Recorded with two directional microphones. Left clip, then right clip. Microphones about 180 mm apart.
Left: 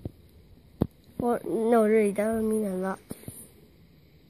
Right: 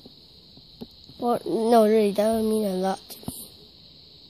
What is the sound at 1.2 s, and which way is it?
Speech, 25° right (ahead or behind).